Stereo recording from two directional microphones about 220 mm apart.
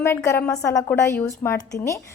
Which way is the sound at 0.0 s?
10° left (ahead or behind).